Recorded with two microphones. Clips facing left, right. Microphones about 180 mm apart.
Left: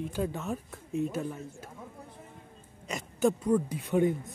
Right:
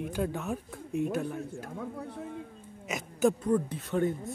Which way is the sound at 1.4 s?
70° right (ahead or behind).